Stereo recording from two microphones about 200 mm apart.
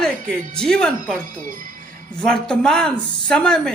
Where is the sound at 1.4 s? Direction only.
40° right (ahead or behind).